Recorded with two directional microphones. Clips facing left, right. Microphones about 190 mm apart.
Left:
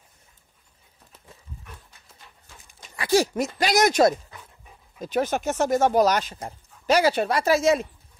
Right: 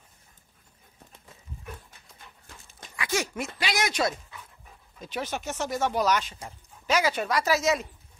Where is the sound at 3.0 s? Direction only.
35° left (ahead or behind).